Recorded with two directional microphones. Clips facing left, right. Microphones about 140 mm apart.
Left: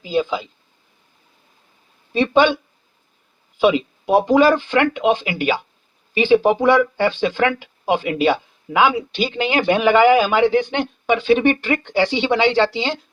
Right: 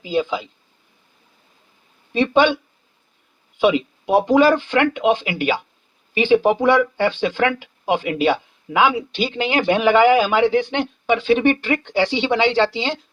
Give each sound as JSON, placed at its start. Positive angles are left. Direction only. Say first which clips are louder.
{"t": 0.0, "sound": "speech", "louder": "left 1 dB", "side_deg": 35}
{"t": 2.1, "sound": "speech", "louder": "left 1 dB", "side_deg": 35}
{"t": 3.6, "sound": "speech", "louder": "left 1 dB", "side_deg": 35}
{"t": 9.1, "sound": "speech", "louder": "left 1 dB", "side_deg": 50}